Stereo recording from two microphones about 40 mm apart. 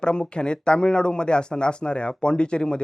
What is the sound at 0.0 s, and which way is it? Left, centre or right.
Speech, left.